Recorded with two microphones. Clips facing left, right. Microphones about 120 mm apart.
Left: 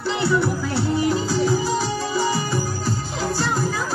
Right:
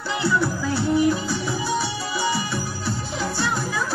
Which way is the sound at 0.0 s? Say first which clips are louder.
Left 2 dB; 25° left (ahead or behind).